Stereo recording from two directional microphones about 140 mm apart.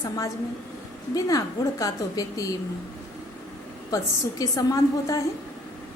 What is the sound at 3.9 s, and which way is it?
A woman's voice, 25° left (ahead or behind).